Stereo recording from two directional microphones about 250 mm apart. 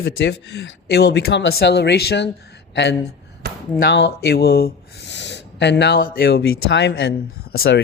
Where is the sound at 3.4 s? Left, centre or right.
Right.